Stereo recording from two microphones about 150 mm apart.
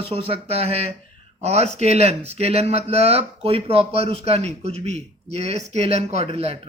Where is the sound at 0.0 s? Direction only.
40° right (ahead or behind).